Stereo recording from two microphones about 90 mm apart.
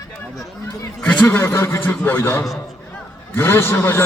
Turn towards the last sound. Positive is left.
turn(degrees=25)  # may be behind; listen again after turning